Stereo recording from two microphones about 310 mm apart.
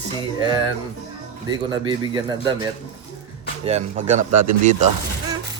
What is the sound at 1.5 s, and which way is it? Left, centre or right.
Speech, centre.